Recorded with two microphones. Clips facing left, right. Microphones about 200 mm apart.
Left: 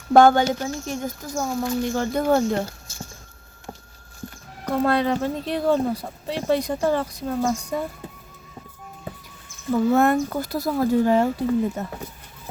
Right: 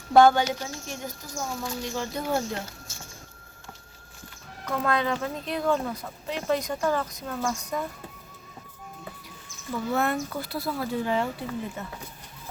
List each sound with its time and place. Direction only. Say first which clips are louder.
0.1 s speech: left 3 dB; 50° left (ahead or behind)
4.6 s speech: left 6 dB; 35° left (ahead or behind)
9.9 s speech: left 6 dB; 50° left (ahead or behind)